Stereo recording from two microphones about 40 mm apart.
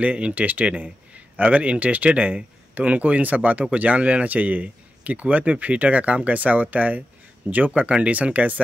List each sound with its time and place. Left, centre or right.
0.0 s speech: right